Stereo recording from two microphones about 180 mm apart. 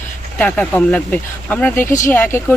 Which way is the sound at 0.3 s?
5° left (ahead or behind).